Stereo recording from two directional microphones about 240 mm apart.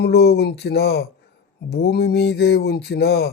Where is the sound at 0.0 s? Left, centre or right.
Left.